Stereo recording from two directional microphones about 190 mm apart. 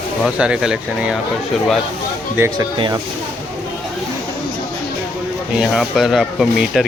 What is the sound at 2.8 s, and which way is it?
Speech, 25° right (ahead or behind).